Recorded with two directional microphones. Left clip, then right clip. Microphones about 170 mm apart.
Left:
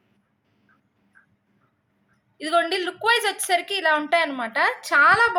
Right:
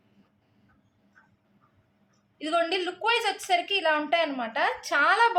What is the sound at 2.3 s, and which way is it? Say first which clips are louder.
A woman's voice: left 4 dB; 30° left (ahead or behind).